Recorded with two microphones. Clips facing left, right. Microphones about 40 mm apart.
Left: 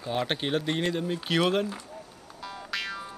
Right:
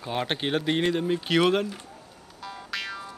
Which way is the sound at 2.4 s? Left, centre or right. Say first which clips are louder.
Even; centre.